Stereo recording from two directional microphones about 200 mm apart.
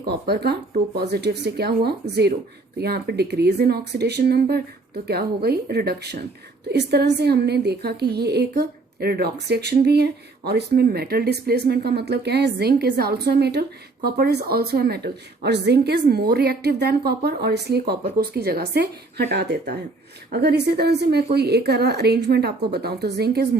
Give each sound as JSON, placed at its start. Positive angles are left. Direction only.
{"t": 0.0, "sound": "a woman's voice", "side_deg": -55}